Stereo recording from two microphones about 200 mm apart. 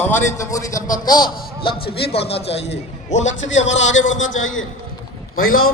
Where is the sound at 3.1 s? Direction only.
35° left (ahead or behind).